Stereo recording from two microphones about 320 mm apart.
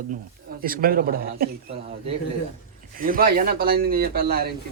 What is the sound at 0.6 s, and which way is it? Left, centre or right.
Speech, right.